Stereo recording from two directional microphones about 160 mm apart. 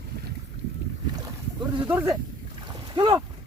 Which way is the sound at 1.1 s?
25° right (ahead or behind).